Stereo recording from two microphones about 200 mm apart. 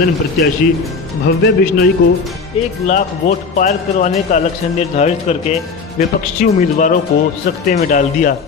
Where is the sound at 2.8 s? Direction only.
40° left (ahead or behind).